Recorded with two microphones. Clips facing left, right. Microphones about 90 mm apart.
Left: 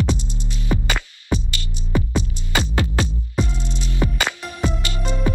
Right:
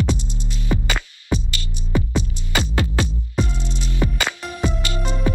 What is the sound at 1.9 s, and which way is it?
Music, 20° left (ahead or behind).